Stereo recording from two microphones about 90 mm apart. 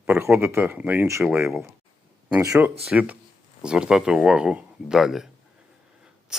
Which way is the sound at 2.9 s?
10° right (ahead or behind).